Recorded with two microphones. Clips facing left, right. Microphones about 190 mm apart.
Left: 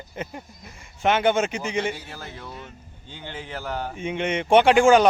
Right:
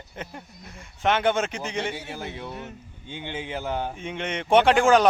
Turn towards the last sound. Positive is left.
turn(degrees=0)  # may be behind; listen again after turning